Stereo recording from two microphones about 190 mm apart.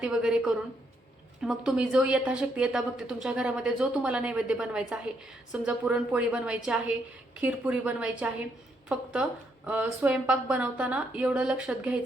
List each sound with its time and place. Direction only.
0.0 s a woman's voice: 5° right (ahead or behind)
9.6 s a woman's voice: 10° right (ahead or behind)